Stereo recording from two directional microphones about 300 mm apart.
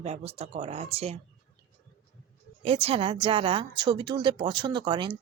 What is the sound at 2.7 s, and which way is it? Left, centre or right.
A woman's voice, centre.